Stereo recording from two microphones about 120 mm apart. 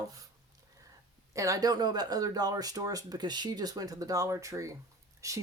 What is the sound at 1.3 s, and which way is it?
Speech, 25° right (ahead or behind).